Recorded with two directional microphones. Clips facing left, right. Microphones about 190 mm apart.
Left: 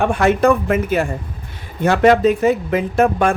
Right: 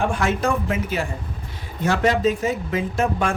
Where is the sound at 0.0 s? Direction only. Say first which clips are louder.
Left 7 dB; 60° left (ahead or behind).